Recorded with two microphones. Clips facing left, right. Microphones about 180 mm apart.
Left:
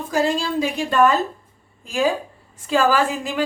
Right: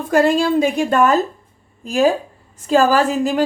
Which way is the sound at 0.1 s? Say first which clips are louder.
Right 7 dB; 55° right (ahead or behind).